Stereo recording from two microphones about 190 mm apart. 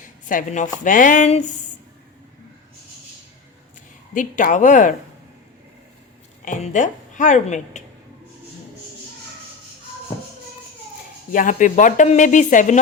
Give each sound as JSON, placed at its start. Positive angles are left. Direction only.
{"t": 0.3, "sound": "speech", "side_deg": 40}
{"t": 4.1, "sound": "speech", "side_deg": 45}
{"t": 6.4, "sound": "speech", "side_deg": 40}
{"t": 11.3, "sound": "speech", "side_deg": 45}